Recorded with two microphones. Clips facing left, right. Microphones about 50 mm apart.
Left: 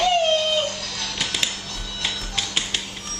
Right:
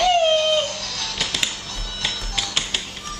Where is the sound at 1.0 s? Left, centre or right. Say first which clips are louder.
Right 1 dB; centre.